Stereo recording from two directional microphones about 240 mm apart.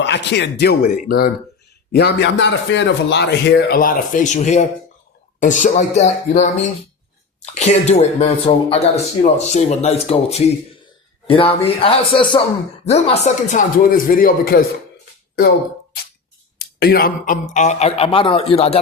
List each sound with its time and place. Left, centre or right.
0.0 s speech: left
16.6 s speech: left